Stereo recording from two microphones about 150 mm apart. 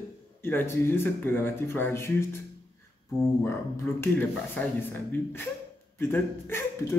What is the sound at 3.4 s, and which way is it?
A man's voice, 15° left (ahead or behind).